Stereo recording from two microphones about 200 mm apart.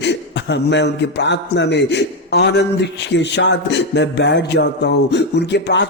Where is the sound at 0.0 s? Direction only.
60° left (ahead or behind).